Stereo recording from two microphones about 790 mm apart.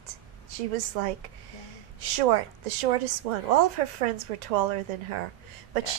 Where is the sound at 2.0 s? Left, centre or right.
Right.